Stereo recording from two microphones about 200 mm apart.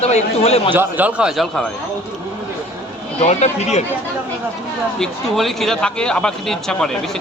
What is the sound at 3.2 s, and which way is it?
Speech, 35° left (ahead or behind).